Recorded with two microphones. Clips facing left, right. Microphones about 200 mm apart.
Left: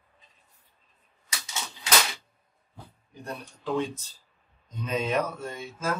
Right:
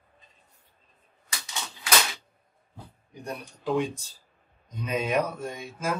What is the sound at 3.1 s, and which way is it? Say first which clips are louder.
Speech: right 1 dB; 15° right (ahead or behind).